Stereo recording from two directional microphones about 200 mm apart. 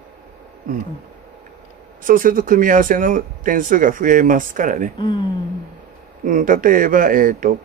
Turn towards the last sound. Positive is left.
turn(degrees=-45)  # may be behind; listen again after turning